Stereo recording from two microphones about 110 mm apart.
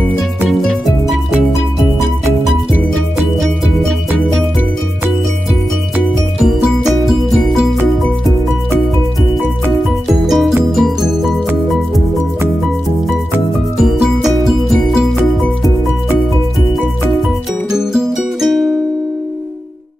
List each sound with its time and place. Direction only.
0.5 s music: centre (ahead or behind)
3.2 s music: centre (ahead or behind)
6.4 s music: centre (ahead or behind)
10.0 s music: centre (ahead or behind)
13.7 s music: centre (ahead or behind)
17.6 s music: 5° right (ahead or behind)